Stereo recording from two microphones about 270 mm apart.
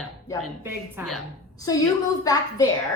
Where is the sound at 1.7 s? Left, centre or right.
Centre.